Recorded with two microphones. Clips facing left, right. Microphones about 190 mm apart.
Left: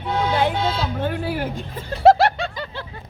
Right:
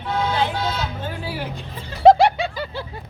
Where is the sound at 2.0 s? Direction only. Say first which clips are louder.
Right 2 dB; centre (ahead or behind).